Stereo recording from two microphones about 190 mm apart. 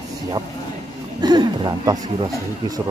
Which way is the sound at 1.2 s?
20° right (ahead or behind).